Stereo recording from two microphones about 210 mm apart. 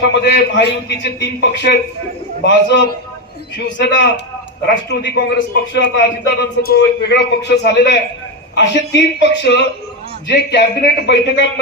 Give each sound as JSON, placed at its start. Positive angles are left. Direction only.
{"t": 0.1, "sound": "a man's voice", "side_deg": 55}